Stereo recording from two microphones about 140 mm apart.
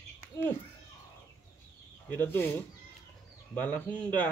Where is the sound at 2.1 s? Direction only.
15° left (ahead or behind).